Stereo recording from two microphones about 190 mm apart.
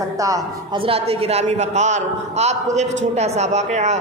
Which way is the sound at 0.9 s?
30° right (ahead or behind).